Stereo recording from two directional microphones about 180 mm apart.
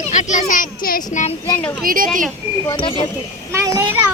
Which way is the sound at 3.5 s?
15° right (ahead or behind).